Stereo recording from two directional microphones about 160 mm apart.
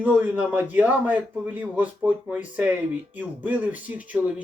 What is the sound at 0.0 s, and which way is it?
A man's voice, 10° right (ahead or behind).